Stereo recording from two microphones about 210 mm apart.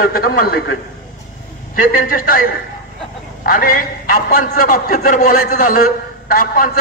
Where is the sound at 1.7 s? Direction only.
40° left (ahead or behind).